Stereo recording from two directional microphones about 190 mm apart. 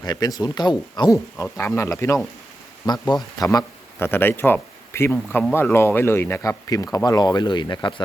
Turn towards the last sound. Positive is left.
turn(degrees=25)  # may be behind; listen again after turning